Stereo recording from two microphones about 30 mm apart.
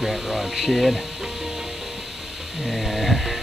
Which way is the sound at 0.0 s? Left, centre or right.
Centre.